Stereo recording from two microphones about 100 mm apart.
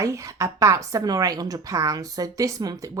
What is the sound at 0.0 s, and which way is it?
A woman's voice, 30° right (ahead or behind).